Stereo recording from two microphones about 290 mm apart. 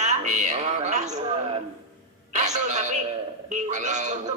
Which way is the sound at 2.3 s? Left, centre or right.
Right.